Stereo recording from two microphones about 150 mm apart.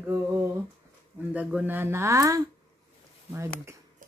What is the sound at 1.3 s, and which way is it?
Speech, 10° right (ahead or behind).